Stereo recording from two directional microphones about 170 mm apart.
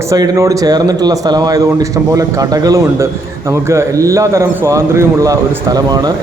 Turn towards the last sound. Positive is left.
turn(degrees=-25)  # may be behind; listen again after turning